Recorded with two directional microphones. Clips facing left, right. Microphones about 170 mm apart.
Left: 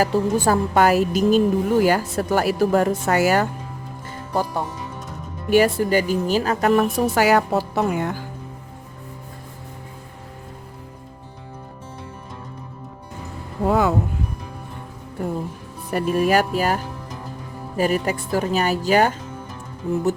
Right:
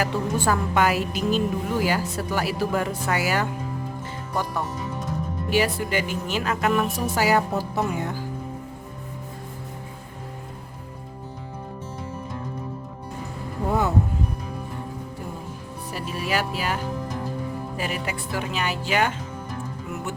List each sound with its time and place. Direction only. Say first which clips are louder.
0.0 s a woman's voice: left 5 dB; 35° left (ahead or behind)
5.5 s speech: left 7 dB; 50° left (ahead or behind)
7.2 s speech: left 3 dB; 70° left (ahead or behind)
13.7 s a sound: left 5 dB; 90° left
15.9 s a woman's voice: left 9 dB; 55° left (ahead or behind); by 20.0 s 35° left (ahead or behind)